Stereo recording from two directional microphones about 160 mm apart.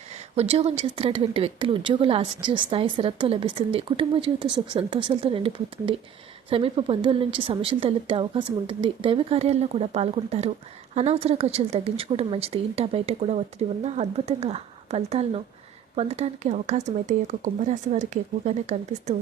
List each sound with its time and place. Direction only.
0.3 s speech: 40° right (ahead or behind)